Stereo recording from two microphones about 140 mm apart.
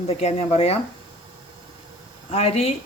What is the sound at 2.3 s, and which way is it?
Speech, 45° left (ahead or behind).